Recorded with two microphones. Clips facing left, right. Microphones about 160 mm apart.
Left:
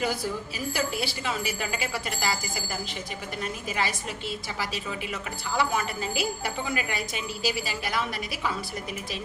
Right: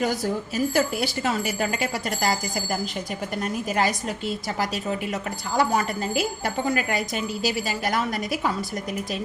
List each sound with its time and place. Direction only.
0.5 s a woman's voice: 45° right (ahead or behind)
3.4 s a woman's voice: 45° right (ahead or behind)